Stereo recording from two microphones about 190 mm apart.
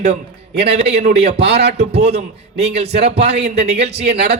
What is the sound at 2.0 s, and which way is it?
A man's voice, 35° right (ahead or behind).